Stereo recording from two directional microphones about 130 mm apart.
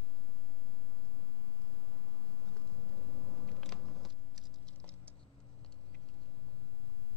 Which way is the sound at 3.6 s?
Centre (ahead or behind).